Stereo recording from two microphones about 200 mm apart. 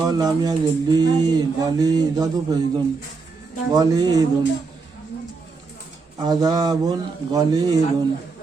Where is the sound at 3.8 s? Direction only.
20° right (ahead or behind).